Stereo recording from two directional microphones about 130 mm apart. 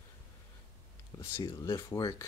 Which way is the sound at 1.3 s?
25° left (ahead or behind).